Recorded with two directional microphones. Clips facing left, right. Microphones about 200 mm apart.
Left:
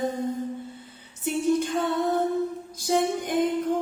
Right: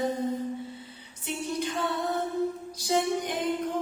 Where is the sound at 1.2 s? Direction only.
50° left (ahead or behind).